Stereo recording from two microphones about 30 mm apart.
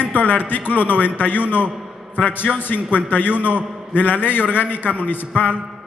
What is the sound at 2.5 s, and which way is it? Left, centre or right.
Speech, left.